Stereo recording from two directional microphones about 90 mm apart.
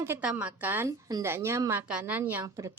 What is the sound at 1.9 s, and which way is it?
Speech, 15° right (ahead or behind).